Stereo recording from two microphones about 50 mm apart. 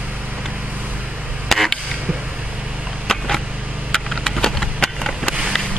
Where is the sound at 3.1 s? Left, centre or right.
Centre.